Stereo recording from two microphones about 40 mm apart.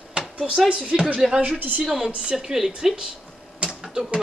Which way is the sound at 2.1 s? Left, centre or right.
Right.